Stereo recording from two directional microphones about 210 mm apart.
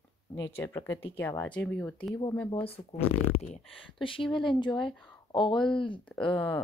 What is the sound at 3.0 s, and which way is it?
Speech, 90° left.